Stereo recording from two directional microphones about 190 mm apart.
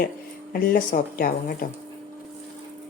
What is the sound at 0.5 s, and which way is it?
A woman's voice, 45° left (ahead or behind).